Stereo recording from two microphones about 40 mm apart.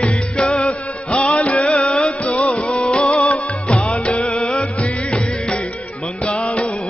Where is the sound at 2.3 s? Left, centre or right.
Left.